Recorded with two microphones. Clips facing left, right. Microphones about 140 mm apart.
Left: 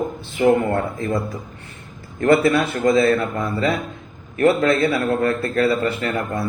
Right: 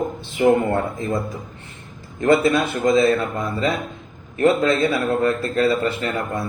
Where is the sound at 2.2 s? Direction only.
20° right (ahead or behind).